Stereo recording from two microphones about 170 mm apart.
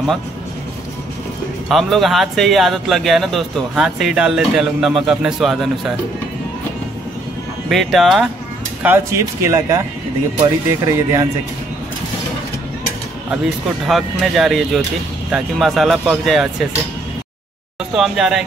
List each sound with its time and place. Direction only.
1.7 s a man's voice: centre (ahead or behind)
7.7 s a man's voice: centre (ahead or behind)
8.8 s speech: 15° right (ahead or behind)
13.8 s a man's voice: centre (ahead or behind)
17.9 s a man's voice: centre (ahead or behind)